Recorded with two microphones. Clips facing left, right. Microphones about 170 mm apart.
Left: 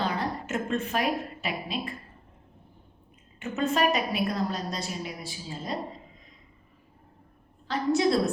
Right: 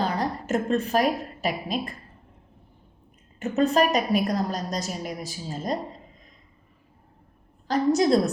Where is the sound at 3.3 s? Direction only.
40° right (ahead or behind).